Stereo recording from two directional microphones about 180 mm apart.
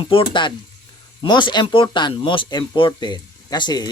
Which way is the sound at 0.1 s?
25° left (ahead or behind).